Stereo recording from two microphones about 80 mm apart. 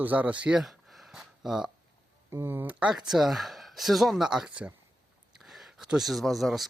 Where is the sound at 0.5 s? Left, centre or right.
Centre.